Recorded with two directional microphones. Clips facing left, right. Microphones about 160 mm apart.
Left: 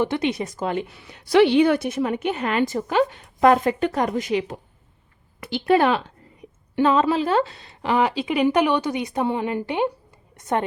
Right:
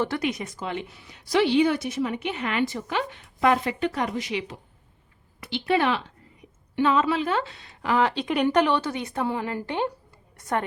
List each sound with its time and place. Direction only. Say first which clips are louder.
0.0 s speech: left 4 dB; 20° left (ahead or behind)
0.5 s a woman's voice: left 6 dB; 45° left (ahead or behind)
0.9 s a woman's voice: left 5 dB; 65° left (ahead or behind); by 8.0 s 25° left (ahead or behind)
8.0 s a woman's voice: left 3 dB; 5° left (ahead or behind); by 10.6 s 20° left (ahead or behind)